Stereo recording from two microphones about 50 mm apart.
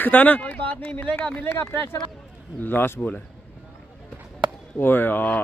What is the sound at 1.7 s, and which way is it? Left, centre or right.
Speech, left.